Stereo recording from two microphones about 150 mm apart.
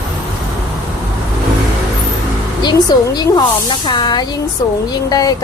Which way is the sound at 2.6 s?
25° left (ahead or behind).